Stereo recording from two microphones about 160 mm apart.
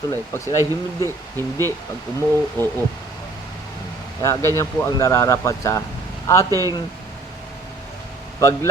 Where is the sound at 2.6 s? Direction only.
15° left (ahead or behind).